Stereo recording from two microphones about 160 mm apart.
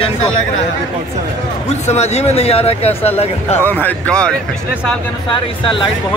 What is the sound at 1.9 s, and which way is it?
Speech, 40° left (ahead or behind).